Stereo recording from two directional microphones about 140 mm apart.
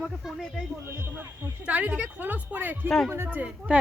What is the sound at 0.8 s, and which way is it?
Speech, 15° right (ahead or behind).